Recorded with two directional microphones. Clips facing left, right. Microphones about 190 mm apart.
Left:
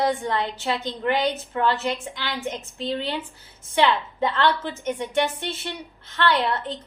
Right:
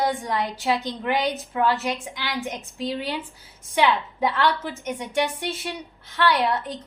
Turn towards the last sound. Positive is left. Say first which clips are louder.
# right 1 dB
turn(degrees=-15)  # may be behind; listen again after turning